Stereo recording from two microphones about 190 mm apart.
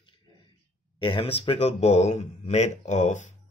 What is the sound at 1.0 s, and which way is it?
Speech, 25° left (ahead or behind).